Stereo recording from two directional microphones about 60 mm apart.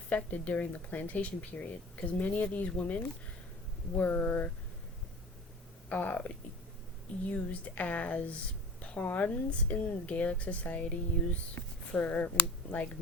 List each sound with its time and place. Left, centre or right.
0.1 s a woman's voice: left
5.9 s a woman's voice: left